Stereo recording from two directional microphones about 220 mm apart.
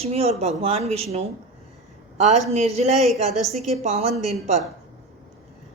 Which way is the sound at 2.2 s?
30° right (ahead or behind).